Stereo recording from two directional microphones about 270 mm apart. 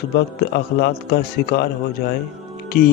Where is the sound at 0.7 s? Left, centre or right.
Left.